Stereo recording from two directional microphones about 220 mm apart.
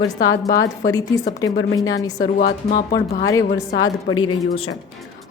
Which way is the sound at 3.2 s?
15° left (ahead or behind).